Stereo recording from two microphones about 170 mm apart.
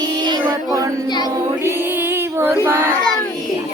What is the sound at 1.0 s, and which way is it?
Music, 25° left (ahead or behind).